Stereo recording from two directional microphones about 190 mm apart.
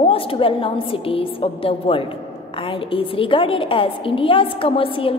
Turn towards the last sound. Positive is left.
turn(degrees=30)  # may be behind; listen again after turning